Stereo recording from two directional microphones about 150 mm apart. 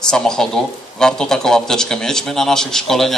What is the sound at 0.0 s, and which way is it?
Speech, 5° left (ahead or behind).